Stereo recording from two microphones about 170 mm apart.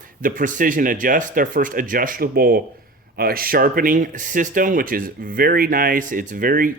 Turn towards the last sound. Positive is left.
turn(degrees=-55)  # may be behind; listen again after turning